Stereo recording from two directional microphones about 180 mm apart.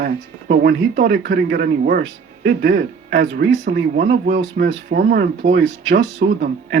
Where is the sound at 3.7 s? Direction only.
50° right (ahead or behind).